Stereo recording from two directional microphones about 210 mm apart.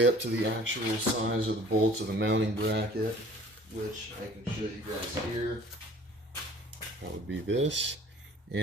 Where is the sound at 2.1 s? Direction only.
55° right (ahead or behind).